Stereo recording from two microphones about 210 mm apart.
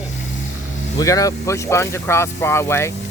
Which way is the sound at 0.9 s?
15° left (ahead or behind).